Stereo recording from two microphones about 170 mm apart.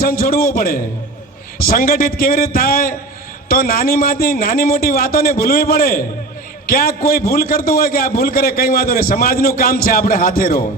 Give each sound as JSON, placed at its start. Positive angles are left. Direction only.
{"t": 0.0, "sound": "a man's voice", "side_deg": 60}